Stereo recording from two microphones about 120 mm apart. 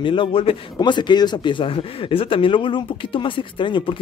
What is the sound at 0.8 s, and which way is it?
Speech, 40° left (ahead or behind).